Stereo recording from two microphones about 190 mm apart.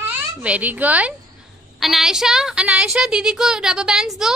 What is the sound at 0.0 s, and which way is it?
A child's voice, 5° right (ahead or behind).